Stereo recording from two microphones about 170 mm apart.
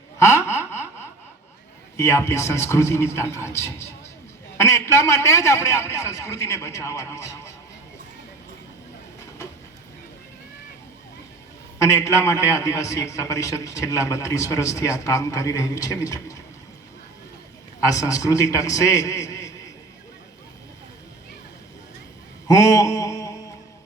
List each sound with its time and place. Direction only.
0.2 s a sound: 15° left (ahead or behind)
2.0 s a man's voice: 15° left (ahead or behind)
11.8 s a man's voice: 20° left (ahead or behind)
17.9 s a man's voice: 20° left (ahead or behind)
22.4 s mantra: 20° left (ahead or behind)